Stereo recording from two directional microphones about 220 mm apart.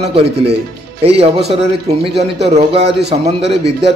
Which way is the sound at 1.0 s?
25° right (ahead or behind).